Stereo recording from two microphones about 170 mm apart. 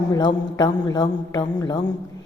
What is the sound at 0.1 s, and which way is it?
A woman's voice, 20° left (ahead or behind).